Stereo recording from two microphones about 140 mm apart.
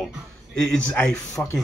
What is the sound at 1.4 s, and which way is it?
Speech, 10° left (ahead or behind).